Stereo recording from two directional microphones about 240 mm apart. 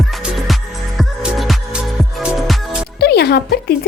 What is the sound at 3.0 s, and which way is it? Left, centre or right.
Speech, left.